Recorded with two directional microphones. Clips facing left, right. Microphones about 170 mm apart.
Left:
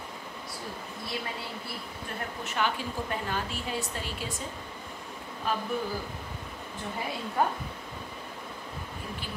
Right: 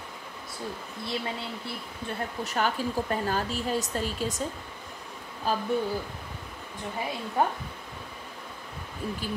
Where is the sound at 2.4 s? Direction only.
40° right (ahead or behind).